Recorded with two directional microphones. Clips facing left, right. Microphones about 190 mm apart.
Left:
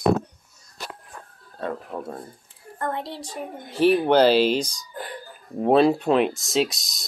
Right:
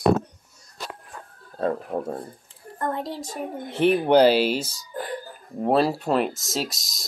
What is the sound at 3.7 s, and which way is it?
Speech, 20° right (ahead or behind).